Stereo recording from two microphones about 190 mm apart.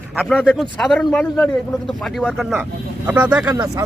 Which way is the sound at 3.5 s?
15° right (ahead or behind).